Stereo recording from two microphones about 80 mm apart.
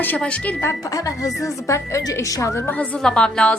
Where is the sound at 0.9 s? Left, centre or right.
Left.